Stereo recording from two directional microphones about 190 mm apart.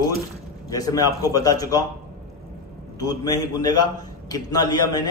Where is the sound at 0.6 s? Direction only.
20° left (ahead or behind).